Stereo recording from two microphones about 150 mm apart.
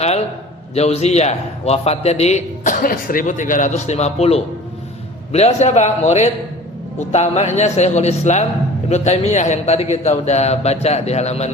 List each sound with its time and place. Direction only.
0.7 s a man's voice: 45° left (ahead or behind)
2.8 s a man's voice: 70° left (ahead or behind); by 11.5 s 45° left (ahead or behind)